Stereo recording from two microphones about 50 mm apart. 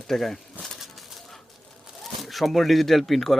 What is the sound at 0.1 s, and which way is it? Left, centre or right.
Speech, centre.